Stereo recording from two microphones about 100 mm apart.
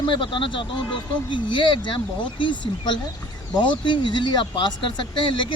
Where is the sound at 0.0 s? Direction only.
55° left (ahead or behind).